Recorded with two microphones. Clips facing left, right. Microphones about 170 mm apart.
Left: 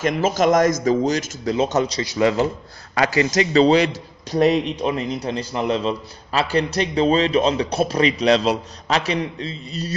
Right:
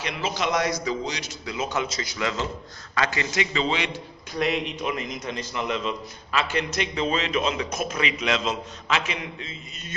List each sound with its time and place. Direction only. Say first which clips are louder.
0.0 s speech: left 10 dB; 45° left (ahead or behind)